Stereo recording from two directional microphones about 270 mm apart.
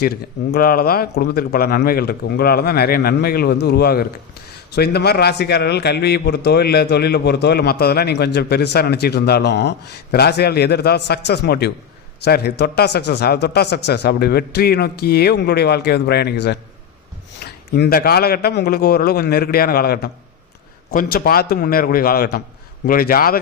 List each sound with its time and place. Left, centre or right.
0.5 s a man's voice: left